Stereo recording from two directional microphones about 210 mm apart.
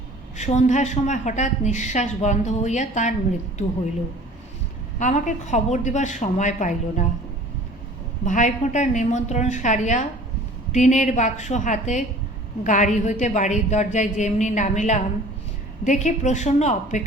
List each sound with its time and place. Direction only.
0.3 s a woman's voice: 35° left (ahead or behind)
4.9 s a woman's voice: 35° left (ahead or behind)
8.2 s a woman's voice: 35° left (ahead or behind)